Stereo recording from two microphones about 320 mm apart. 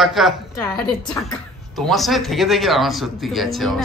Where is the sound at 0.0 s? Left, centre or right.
Centre.